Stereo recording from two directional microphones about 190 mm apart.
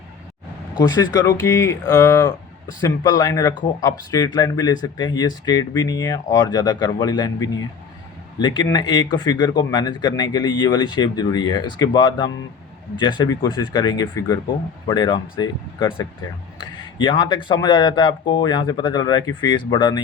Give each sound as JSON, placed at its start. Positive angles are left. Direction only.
{"t": 0.8, "sound": "speech", "side_deg": 20}